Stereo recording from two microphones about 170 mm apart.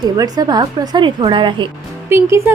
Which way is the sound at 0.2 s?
25° right (ahead or behind).